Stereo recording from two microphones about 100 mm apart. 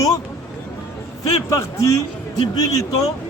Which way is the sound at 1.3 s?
35° left (ahead or behind).